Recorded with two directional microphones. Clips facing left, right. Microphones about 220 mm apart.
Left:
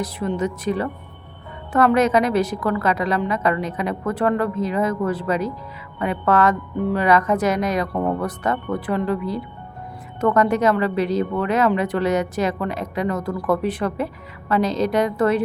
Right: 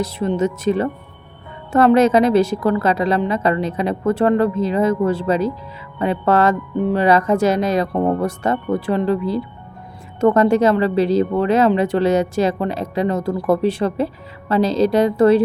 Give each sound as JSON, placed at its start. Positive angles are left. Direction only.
{"t": 0.0, "sound": "speech", "side_deg": -25}